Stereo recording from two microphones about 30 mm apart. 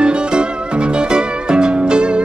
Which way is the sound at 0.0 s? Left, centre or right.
Right.